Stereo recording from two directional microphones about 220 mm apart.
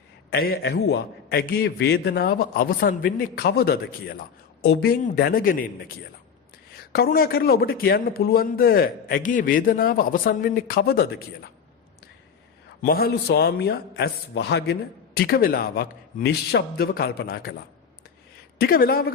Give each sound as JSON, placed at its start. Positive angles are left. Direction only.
{"t": 0.3, "sound": "a man's voice", "side_deg": 45}
{"t": 6.9, "sound": "a man's voice", "side_deg": 45}
{"t": 12.8, "sound": "a man's voice", "side_deg": 45}
{"t": 18.6, "sound": "a man's voice", "side_deg": 40}